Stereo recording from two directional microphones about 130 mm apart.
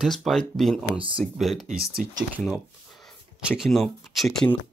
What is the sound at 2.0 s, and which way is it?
Speech, 80° right.